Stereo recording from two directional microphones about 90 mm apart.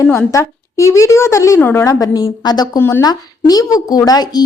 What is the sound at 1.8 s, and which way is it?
Speech, 40° left (ahead or behind).